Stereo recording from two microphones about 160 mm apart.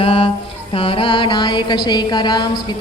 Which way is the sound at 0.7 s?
35° left (ahead or behind).